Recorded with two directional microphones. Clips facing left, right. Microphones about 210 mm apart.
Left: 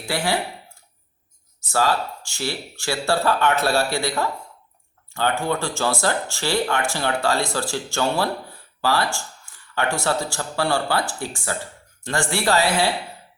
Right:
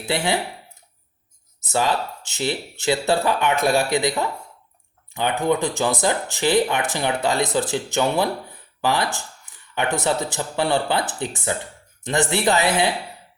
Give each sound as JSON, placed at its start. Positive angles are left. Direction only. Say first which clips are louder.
{"t": 0.0, "sound": "speech", "louder": "right 1 dB", "side_deg": -20}
{"t": 1.6, "sound": "speech", "louder": "even", "side_deg": -20}